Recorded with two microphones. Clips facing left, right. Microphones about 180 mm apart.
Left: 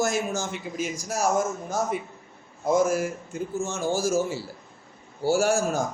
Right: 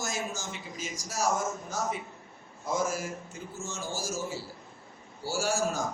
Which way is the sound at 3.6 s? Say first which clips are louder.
Left 10 dB; 60° left (ahead or behind).